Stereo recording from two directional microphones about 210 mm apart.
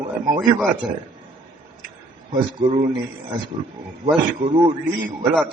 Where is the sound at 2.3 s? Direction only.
25° right (ahead or behind).